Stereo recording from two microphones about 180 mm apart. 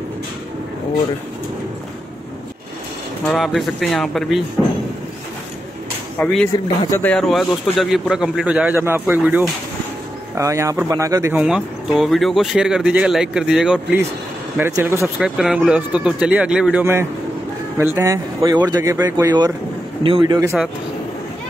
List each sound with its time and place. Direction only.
3.3 s speech: centre (ahead or behind)
6.1 s speech: 10° left (ahead or behind); by 11.4 s 15° right (ahead or behind)
11.4 s speech: 5° right (ahead or behind)
15.1 s speech: centre (ahead or behind); by 20.5 s 20° right (ahead or behind)